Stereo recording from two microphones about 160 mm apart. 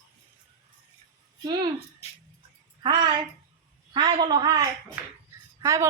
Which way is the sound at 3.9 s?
25° right (ahead or behind).